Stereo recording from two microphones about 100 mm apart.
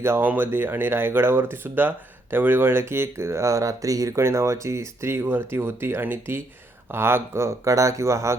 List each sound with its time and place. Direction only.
0.0 s speech: 20° right (ahead or behind)